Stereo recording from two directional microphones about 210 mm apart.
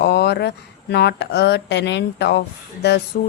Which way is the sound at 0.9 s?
55° left (ahead or behind).